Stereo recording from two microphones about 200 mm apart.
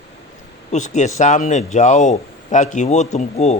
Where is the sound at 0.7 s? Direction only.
35° left (ahead or behind).